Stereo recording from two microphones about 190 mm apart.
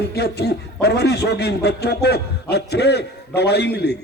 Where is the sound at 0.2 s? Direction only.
60° left (ahead or behind).